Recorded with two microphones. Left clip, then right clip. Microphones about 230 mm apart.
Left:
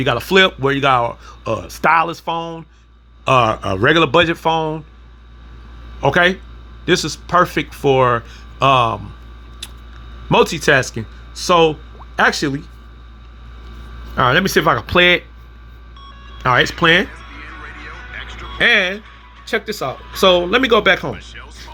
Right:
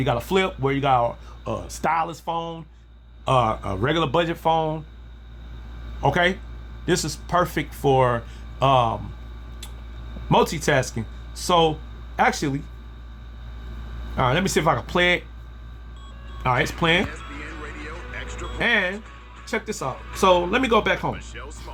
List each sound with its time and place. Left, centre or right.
0.0 s speech: centre
6.0 s speech: centre
10.2 s speech: centre
14.2 s speech: centre
16.4 s speech: centre
17.3 s music: centre
18.6 s speech: centre
21.1 s speech: centre